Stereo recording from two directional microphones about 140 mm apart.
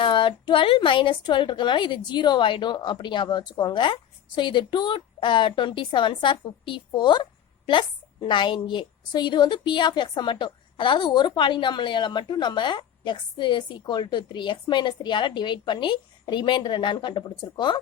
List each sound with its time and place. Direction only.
0.0 s a woman's voice: 35° left (ahead or behind)